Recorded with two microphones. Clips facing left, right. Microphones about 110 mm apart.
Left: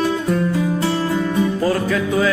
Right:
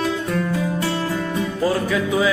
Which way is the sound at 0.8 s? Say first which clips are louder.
Left 3 dB; 20° left (ahead or behind).